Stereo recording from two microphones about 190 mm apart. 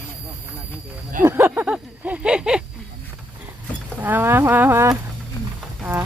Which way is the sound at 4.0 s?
10° right (ahead or behind).